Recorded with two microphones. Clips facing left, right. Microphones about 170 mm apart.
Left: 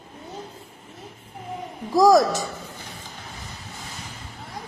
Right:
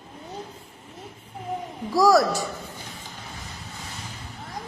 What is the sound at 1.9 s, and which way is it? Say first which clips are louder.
Speech: left 2 dB; 20° left (ahead or behind).